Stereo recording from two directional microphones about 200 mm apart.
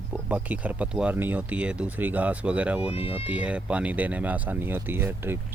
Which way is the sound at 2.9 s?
30° left (ahead or behind).